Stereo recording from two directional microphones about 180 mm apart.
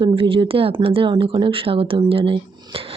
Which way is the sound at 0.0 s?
30° right (ahead or behind).